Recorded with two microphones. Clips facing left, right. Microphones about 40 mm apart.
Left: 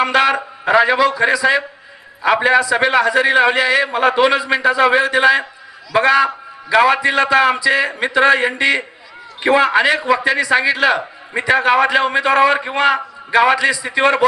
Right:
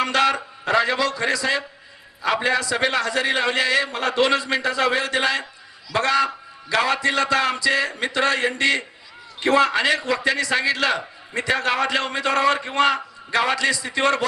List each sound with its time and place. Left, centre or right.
0.0 s a man's voice: left